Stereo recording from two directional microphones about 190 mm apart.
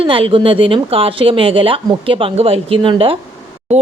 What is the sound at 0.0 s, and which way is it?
A woman's voice, 30° right (ahead or behind).